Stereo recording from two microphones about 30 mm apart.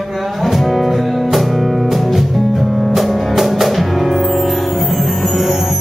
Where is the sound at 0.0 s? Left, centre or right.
Centre.